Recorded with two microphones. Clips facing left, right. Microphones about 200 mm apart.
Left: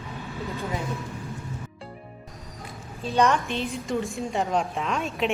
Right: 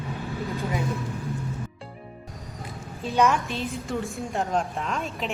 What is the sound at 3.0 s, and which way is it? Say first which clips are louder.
Speech: even; centre (ahead or behind).